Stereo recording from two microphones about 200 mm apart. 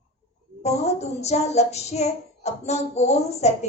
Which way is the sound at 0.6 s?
35° left (ahead or behind).